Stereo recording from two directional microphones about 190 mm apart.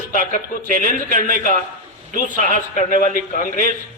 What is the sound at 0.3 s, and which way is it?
A man's voice, 45° left (ahead or behind).